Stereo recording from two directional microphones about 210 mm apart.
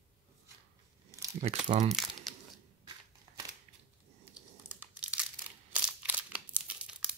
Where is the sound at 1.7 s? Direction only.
35° right (ahead or behind).